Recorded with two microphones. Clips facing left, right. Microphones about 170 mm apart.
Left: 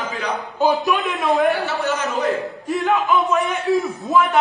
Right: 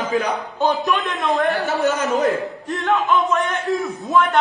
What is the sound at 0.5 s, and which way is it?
A man's voice, 5° left (ahead or behind).